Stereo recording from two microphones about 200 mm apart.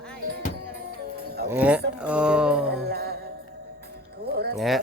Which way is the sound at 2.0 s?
5° right (ahead or behind).